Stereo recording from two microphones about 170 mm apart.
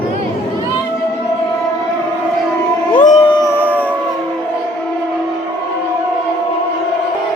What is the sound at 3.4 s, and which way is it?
Music, 15° left (ahead or behind).